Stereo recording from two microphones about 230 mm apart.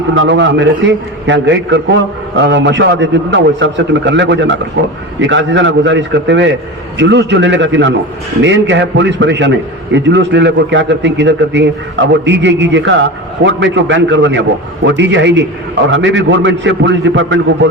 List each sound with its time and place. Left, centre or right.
0.1 s a man's voice: right